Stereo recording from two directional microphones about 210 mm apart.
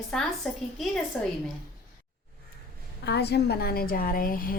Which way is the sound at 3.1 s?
50° left (ahead or behind).